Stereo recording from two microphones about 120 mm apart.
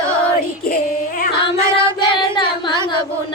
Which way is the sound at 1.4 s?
45° left (ahead or behind).